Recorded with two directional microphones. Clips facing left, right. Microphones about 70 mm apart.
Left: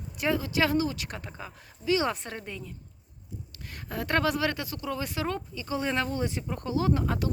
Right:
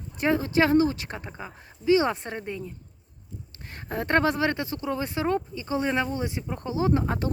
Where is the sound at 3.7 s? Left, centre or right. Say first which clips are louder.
Right 4 dB; right.